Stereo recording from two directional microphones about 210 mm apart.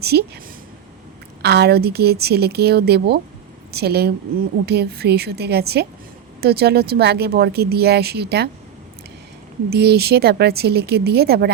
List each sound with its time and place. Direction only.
0.0 s speech: 50° right (ahead or behind)
1.4 s a woman's voice: 50° right (ahead or behind)
9.7 s speech: 50° right (ahead or behind)